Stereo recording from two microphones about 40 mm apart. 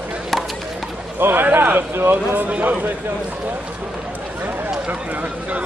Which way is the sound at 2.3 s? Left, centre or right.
Right.